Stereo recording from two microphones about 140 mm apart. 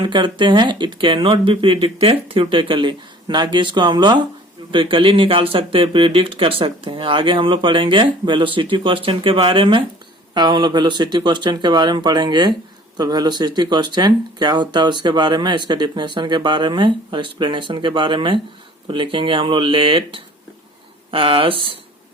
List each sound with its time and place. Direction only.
0.0 s speech: 35° right (ahead or behind)